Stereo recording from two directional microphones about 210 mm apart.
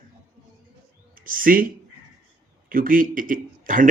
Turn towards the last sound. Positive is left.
turn(degrees=-40)  # may be behind; listen again after turning